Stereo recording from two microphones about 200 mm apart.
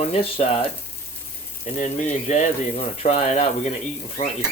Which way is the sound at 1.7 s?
40° left (ahead or behind).